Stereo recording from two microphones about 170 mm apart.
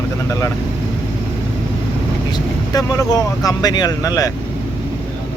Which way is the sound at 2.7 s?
20° left (ahead or behind).